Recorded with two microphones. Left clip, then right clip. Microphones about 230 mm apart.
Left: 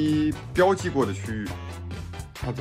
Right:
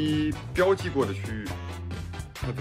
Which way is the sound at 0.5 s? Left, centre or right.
Left.